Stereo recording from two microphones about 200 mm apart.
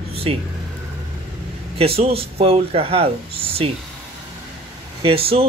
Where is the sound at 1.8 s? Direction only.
30° right (ahead or behind).